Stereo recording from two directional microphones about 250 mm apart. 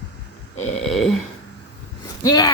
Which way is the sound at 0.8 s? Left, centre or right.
Centre.